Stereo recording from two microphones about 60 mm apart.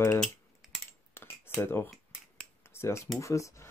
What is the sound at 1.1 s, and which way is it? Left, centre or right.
Computer keyboard, left.